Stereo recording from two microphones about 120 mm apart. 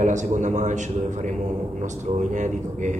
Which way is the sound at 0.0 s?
90° right.